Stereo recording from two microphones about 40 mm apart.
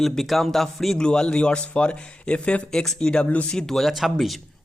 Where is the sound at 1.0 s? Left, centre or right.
Left.